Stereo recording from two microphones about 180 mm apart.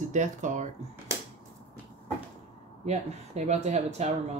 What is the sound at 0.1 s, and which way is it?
Speech, 45° right (ahead or behind).